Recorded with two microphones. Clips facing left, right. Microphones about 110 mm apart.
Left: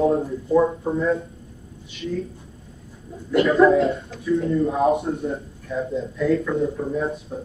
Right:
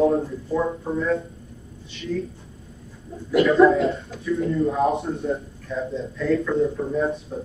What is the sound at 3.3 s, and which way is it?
A man's voice, centre (ahead or behind).